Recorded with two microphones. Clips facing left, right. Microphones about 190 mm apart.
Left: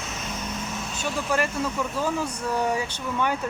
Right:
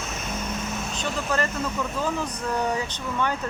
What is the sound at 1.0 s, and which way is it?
Speech, 10° left (ahead or behind).